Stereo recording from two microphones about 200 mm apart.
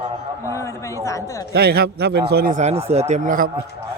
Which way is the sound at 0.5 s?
15° left (ahead or behind).